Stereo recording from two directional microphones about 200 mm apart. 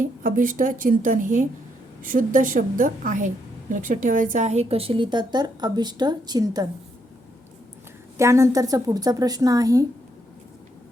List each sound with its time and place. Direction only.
0.2 s a woman's voice: 45° right (ahead or behind); by 6.7 s 20° right (ahead or behind)
8.2 s a woman's voice: 15° right (ahead or behind)